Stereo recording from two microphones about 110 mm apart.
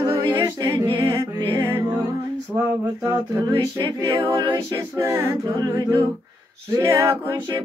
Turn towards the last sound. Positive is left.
turn(degrees=-25)  # may be behind; listen again after turning